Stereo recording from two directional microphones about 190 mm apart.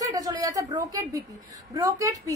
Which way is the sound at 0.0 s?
20° right (ahead or behind).